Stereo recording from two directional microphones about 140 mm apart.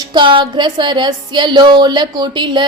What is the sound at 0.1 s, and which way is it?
A woman's voice, 35° right (ahead or behind).